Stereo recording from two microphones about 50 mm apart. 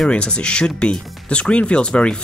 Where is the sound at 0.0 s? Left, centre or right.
Centre.